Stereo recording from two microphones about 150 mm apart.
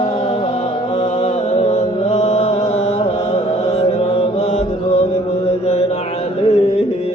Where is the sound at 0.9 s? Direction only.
45° left (ahead or behind).